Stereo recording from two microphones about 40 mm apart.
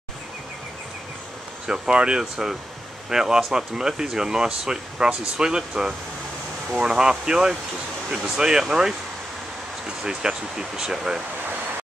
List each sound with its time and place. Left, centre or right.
1.7 s speech: right